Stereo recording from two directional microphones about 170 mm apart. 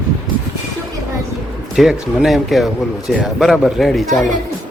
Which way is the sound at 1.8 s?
Centre (ahead or behind).